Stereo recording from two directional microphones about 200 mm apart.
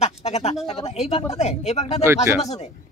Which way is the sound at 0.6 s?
30° left (ahead or behind).